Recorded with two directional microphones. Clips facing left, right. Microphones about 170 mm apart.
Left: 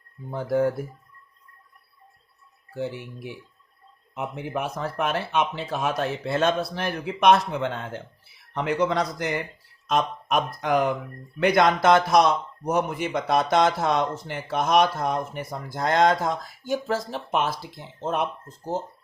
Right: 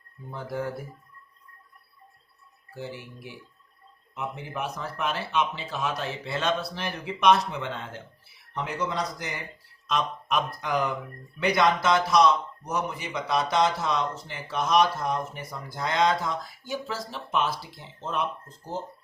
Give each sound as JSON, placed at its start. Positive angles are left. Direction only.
{"t": 0.3, "sound": "a man's voice", "side_deg": 55}
{"t": 4.1, "sound": "a man's voice", "side_deg": 50}
{"t": 8.5, "sound": "speech", "side_deg": 65}
{"t": 9.8, "sound": "a man's voice", "side_deg": 45}